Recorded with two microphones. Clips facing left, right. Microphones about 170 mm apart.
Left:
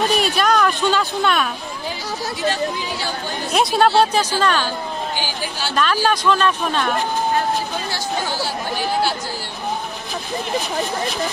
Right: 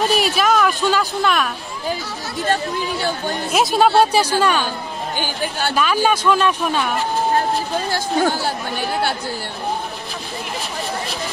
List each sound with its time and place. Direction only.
0.1 s speech: centre (ahead or behind)
2.4 s speech: 50° right (ahead or behind)
3.5 s a man's voice: centre (ahead or behind)
5.1 s speech: 55° right (ahead or behind)
6.0 s a man's voice: 10° right (ahead or behind)
7.9 s speech: 50° right (ahead or behind)